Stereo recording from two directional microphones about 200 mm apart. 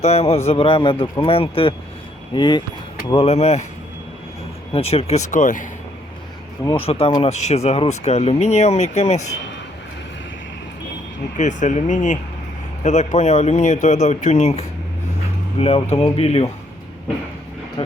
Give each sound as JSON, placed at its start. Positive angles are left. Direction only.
{"t": 0.0, "sound": "a man's voice", "side_deg": 30}
{"t": 4.7, "sound": "speech", "side_deg": 30}
{"t": 6.7, "sound": "speech", "side_deg": 30}
{"t": 11.3, "sound": "a man's voice", "side_deg": 35}
{"t": 17.8, "sound": "a man's voice", "side_deg": 25}